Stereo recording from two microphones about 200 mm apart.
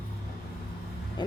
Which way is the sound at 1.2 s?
20° left (ahead or behind).